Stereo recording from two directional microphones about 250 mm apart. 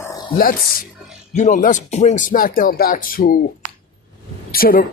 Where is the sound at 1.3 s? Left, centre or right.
Left.